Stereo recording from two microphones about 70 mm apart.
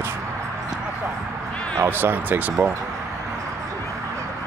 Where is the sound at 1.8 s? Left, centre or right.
Right.